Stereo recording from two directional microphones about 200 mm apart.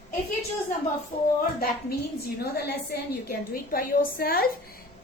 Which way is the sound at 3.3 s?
50° left (ahead or behind).